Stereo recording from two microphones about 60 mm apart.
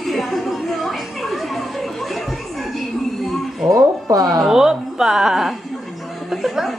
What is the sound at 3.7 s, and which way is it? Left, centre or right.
Speech, right.